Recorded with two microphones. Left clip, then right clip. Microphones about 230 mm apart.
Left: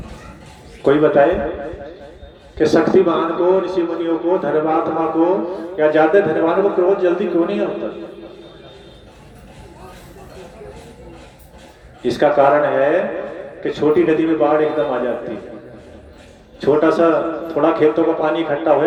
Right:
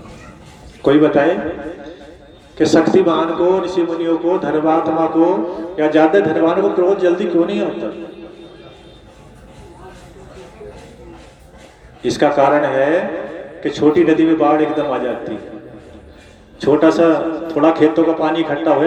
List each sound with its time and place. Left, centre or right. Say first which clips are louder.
0.8 s a man's voice: even; right
2.6 s a man's voice: right 1 dB; right
12.0 s a man's voice: even; right
16.6 s a man's voice: right 2 dB; right